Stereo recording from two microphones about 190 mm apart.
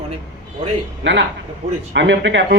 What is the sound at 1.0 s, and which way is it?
A man's voice, 75° right (ahead or behind).